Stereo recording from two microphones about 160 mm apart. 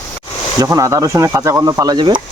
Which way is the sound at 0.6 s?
20° right (ahead or behind).